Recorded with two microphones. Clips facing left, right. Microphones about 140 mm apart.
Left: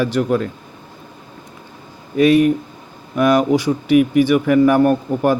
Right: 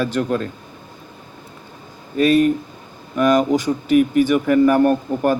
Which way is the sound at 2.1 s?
15° left (ahead or behind).